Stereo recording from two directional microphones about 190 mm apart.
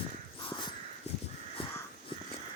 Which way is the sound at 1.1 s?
35° left (ahead or behind).